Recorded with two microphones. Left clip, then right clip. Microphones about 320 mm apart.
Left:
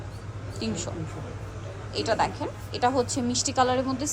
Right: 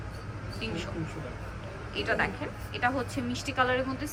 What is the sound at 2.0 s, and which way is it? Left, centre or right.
A woman's voice, centre.